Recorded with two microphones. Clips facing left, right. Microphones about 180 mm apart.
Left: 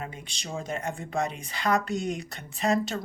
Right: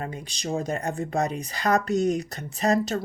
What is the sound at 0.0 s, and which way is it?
Speech, 40° right (ahead or behind).